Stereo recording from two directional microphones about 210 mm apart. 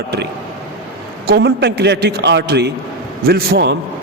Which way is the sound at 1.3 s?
55° right (ahead or behind).